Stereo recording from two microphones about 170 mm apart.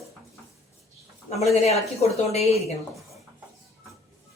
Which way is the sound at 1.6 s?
40° left (ahead or behind).